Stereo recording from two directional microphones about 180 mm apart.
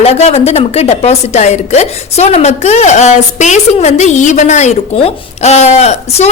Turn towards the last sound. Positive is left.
turn(degrees=35)  # may be behind; listen again after turning